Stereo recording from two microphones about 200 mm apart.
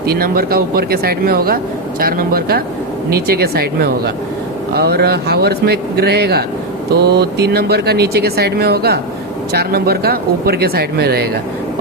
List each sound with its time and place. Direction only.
0.0 s speech: 50° right (ahead or behind)